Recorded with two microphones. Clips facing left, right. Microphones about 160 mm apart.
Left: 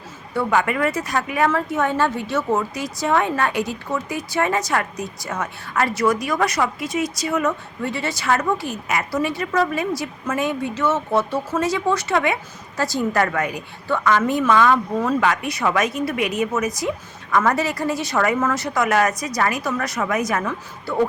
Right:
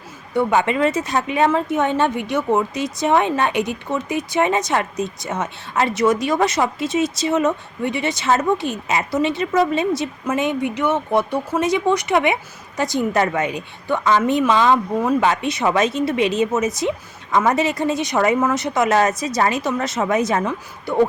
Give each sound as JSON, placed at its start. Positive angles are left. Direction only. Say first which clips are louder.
{"t": 0.3, "sound": "a woman's voice", "louder": "right 3 dB", "side_deg": -25}